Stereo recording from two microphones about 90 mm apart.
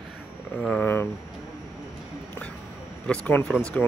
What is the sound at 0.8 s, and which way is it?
Speech, 25° left (ahead or behind).